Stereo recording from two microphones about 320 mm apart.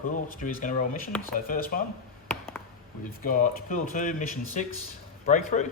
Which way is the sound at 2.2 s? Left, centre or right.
Centre.